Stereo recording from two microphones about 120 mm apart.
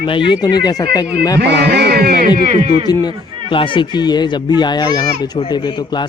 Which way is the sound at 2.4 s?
60° right (ahead or behind).